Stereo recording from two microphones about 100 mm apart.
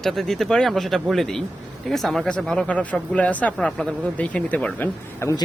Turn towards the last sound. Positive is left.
turn(degrees=25)  # may be behind; listen again after turning